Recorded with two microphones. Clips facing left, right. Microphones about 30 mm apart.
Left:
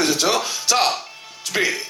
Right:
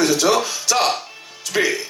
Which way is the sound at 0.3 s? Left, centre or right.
Left.